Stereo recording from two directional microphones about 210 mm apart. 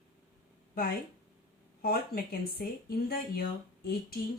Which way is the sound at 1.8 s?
45° left (ahead or behind).